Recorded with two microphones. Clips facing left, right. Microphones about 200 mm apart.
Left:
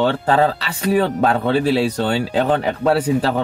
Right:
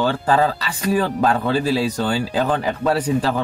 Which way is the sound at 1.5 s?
70° left (ahead or behind).